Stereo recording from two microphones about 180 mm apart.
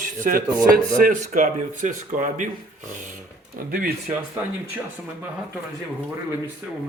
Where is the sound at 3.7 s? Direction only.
55° right (ahead or behind).